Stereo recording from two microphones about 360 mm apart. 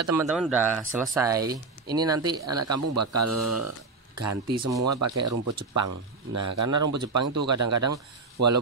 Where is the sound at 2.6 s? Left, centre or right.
Right.